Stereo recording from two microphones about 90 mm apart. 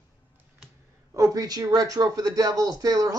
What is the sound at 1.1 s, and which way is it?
Speech, 40° right (ahead or behind).